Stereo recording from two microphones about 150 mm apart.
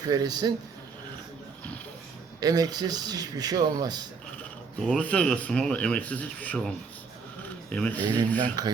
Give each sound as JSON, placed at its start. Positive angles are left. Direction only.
{"t": 0.0, "sound": "a man's voice", "side_deg": -25}
{"t": 2.4, "sound": "a man's voice", "side_deg": -25}
{"t": 4.8, "sound": "speech", "side_deg": 5}
{"t": 7.7, "sound": "speech", "side_deg": 10}
{"t": 8.4, "sound": "a man's voice", "side_deg": -25}